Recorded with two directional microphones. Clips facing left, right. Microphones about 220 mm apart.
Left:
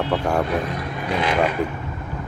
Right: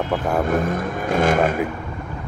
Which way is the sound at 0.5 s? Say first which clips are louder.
Right 4 dB; 45° right (ahead or behind).